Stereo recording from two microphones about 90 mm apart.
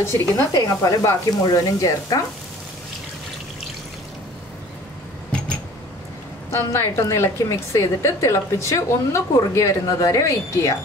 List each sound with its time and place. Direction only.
0.0 s speech: 30° left (ahead or behind)
0.6 s a woman's voice: 40° left (ahead or behind)
6.5 s a woman's voice: 30° left (ahead or behind)